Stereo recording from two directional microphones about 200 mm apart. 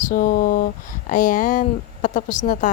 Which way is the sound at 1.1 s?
40° left (ahead or behind).